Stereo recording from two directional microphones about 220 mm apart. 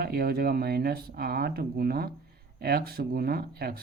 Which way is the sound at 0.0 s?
45° right (ahead or behind).